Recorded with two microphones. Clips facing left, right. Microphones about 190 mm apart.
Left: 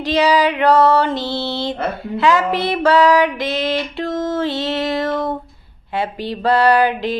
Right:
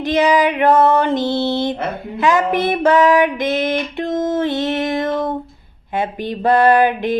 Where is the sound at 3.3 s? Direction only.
50° right (ahead or behind).